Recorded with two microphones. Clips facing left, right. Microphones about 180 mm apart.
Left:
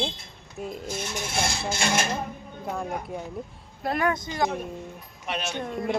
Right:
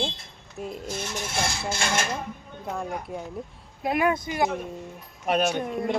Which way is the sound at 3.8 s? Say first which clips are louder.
Right 2 dB; 15° right (ahead or behind).